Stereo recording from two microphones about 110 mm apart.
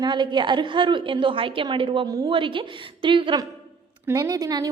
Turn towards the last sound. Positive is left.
turn(degrees=-35)  # may be behind; listen again after turning